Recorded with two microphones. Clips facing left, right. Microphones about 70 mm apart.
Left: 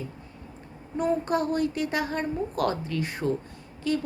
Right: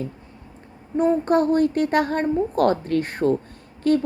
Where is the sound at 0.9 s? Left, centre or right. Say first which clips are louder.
Right 7 dB; right.